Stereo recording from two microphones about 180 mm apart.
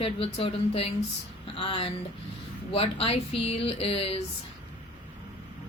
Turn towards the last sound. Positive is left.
turn(degrees=30)  # may be behind; listen again after turning